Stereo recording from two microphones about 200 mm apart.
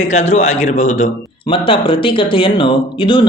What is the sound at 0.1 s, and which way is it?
A man's voice, 35° left (ahead or behind).